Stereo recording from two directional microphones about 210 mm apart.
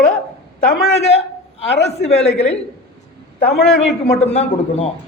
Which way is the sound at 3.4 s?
50° left (ahead or behind).